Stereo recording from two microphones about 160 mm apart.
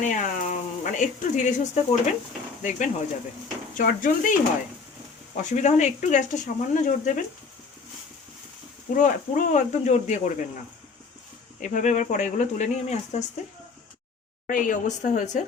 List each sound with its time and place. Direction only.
0.0 s speech: 50° left (ahead or behind)
5.4 s speech: 50° left (ahead or behind)
9.0 s speech: 50° left (ahead or behind)
11.6 s speech: 55° left (ahead or behind)
14.4 s speech: 55° left (ahead or behind)